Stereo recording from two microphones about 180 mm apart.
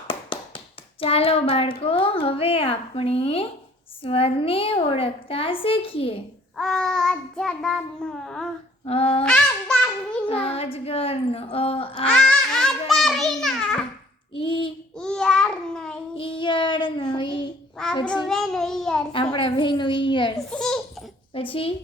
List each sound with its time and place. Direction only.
0.1 s a child's voice: 30° left (ahead or behind)
6.6 s child singing: 5° left (ahead or behind)
8.8 s a sound: 35° left (ahead or behind)
9.2 s a sound: 5° left (ahead or behind)
10.2 s a woman's voice: 30° left (ahead or behind)
12.1 s a sound: 5° left (ahead or behind)
12.9 s a child's voice: centre (ahead or behind)
14.3 s child singing: 30° left (ahead or behind)
14.9 s child singing: 5° left (ahead or behind)
16.1 s child singing: 30° left (ahead or behind)
17.8 s child singing: 5° left (ahead or behind)
19.1 s child singing: 30° left (ahead or behind)
20.5 s child singing: 5° left (ahead or behind)
21.3 s a woman's voice: 30° left (ahead or behind)